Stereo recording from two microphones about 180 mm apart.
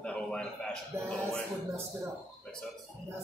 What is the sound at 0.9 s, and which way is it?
Speech, 15° right (ahead or behind).